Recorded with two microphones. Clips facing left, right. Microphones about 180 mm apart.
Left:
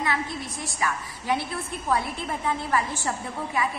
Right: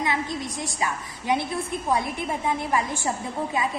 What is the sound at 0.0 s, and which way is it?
A woman's voice, 15° right (ahead or behind).